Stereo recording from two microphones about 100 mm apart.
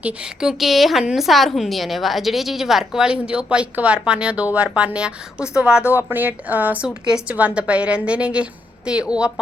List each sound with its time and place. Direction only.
0.0 s a woman's voice: 10° right (ahead or behind)
5.8 s speech: 25° left (ahead or behind)
6.1 s a woman's voice: 20° right (ahead or behind)